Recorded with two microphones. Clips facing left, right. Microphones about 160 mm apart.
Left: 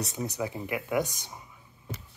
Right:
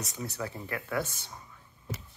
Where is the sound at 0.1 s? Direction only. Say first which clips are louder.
Left 4 dB; 15° left (ahead or behind).